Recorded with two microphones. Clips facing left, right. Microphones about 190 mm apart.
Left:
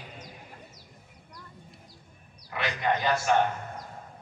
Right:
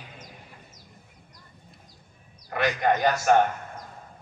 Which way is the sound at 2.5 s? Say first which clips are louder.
Right 5 dB; 45° right (ahead or behind).